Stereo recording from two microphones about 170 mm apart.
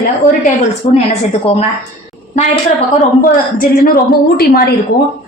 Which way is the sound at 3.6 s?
60° left (ahead or behind).